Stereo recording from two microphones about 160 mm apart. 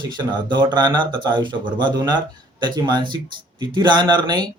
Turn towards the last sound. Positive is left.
turn(degrees=-25)  # may be behind; listen again after turning